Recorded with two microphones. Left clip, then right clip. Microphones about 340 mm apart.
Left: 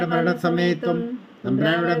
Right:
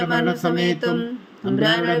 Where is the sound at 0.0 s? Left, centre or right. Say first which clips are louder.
Right 1 dB; centre.